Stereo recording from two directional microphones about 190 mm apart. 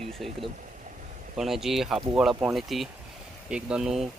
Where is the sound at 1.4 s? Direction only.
Centre (ahead or behind).